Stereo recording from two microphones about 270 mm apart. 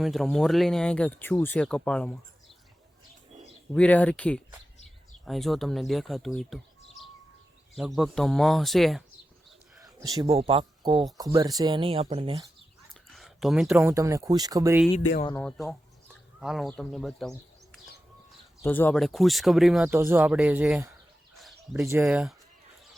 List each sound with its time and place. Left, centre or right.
0.0 s speech: centre
3.7 s speech: centre
9.8 s speech: centre
12.9 s speech: centre
15.4 s speech: centre